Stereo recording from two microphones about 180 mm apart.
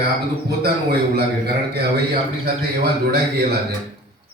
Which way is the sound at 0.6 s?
60° right (ahead or behind).